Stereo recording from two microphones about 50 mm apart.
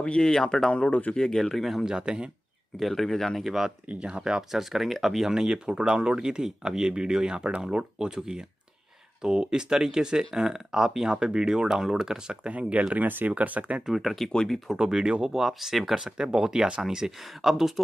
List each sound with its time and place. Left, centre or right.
0.0 s speech: centre
0.7 s speech: left
1.1 s speech: centre
1.9 s speech: centre
2.8 s speech: centre
3.9 s speech: centre
4.5 s speech: centre
12.4 s speech: right
13.8 s speech: centre
14.3 s speech: centre
14.7 s speech: centre
15.3 s speech: centre
17.2 s speech: centre